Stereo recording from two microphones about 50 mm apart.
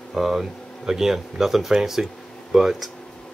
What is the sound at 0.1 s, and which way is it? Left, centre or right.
Speech, centre.